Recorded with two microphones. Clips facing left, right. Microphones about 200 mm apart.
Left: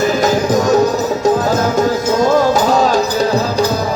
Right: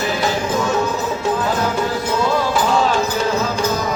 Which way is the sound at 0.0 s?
40° left (ahead or behind).